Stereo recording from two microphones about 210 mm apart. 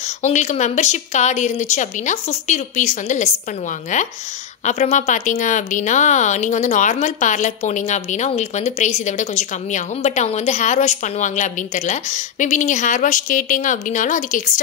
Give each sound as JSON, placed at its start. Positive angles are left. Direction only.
{"t": 0.0, "sound": "speech", "side_deg": 35}